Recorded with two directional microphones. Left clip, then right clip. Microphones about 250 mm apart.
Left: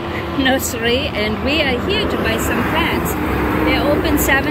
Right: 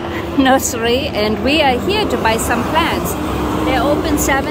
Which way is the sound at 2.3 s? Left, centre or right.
Right.